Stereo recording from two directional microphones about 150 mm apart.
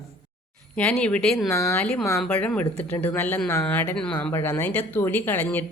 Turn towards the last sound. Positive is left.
turn(degrees=10)  # may be behind; listen again after turning